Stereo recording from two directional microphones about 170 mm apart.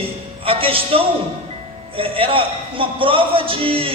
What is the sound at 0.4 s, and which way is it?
A man's voice, 35° right (ahead or behind).